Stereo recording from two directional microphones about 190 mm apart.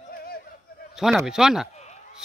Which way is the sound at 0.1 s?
55° left (ahead or behind).